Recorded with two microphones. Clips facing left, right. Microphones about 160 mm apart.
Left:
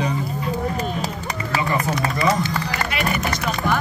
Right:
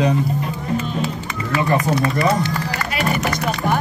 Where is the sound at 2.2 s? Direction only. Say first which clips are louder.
Right 2 dB; 60° right (ahead or behind).